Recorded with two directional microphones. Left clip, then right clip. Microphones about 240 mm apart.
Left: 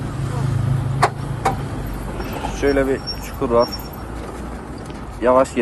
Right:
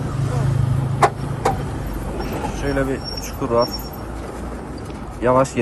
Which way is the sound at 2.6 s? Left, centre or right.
Left.